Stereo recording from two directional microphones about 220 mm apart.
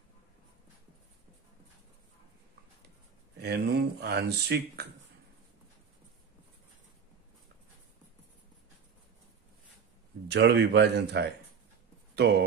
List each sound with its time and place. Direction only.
3.3 s speech: 50° right (ahead or behind)
10.2 s speech: 50° right (ahead or behind)